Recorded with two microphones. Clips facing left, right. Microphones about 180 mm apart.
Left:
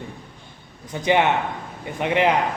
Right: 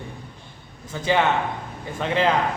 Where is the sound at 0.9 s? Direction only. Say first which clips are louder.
Left 2 dB; 20° left (ahead or behind).